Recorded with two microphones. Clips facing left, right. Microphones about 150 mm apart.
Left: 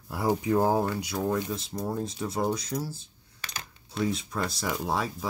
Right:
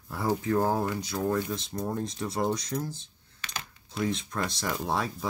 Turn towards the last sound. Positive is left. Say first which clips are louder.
# even
turn(degrees=0)  # may be behind; listen again after turning